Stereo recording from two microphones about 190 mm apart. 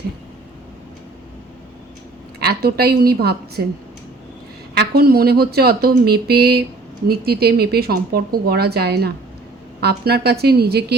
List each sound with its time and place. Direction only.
2.4 s speech: 55° right (ahead or behind)
4.7 s speech: 55° right (ahead or behind)